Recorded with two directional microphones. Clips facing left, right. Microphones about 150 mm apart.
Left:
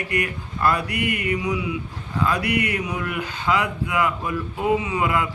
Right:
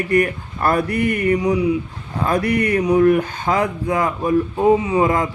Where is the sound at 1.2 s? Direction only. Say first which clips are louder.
Right 8 dB; 35° right (ahead or behind).